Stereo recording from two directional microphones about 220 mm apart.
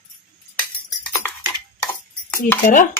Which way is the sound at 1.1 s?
10° left (ahead or behind).